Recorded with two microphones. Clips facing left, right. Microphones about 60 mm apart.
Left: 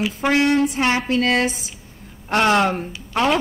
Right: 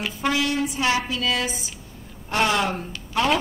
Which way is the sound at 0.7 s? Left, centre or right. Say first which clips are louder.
Left 4 dB; left.